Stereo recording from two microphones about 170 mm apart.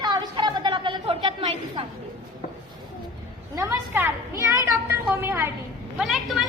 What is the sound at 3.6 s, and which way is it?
A woman's voice, 15° right (ahead or behind).